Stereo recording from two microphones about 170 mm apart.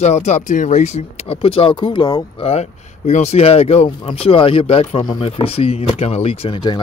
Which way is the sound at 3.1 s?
40° left (ahead or behind).